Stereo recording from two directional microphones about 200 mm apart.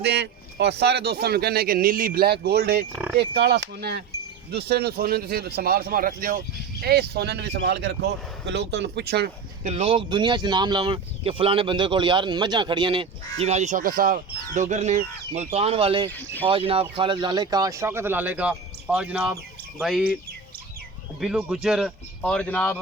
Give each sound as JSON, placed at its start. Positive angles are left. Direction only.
{"t": 0.0, "sound": "speech", "side_deg": -55}
{"t": 9.7, "sound": "speech", "side_deg": -30}
{"t": 16.1, "sound": "speech", "side_deg": 10}
{"t": 16.5, "sound": "speech", "side_deg": -30}
{"t": 21.2, "sound": "speech", "side_deg": -5}